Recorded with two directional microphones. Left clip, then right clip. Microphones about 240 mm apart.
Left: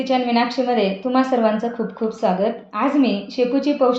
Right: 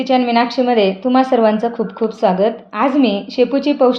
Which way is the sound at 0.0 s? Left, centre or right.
Right.